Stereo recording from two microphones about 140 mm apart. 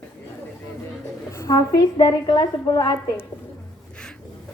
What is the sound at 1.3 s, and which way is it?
A woman's voice, 20° left (ahead or behind).